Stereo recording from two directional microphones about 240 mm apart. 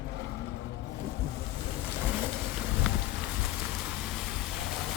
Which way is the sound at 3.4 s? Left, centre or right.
Centre.